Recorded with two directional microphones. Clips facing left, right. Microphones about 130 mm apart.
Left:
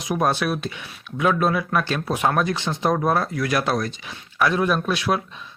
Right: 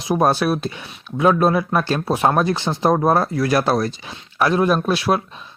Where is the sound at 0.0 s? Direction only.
35° right (ahead or behind).